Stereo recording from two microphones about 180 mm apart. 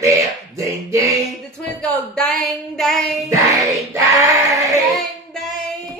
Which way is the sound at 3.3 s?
20° right (ahead or behind).